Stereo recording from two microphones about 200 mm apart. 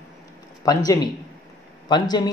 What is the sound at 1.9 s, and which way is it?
Speech, 20° left (ahead or behind).